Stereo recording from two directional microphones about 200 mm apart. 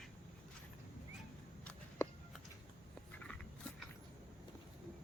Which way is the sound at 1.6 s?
5° left (ahead or behind).